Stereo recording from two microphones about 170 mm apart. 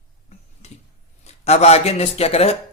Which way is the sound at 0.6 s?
40° left (ahead or behind).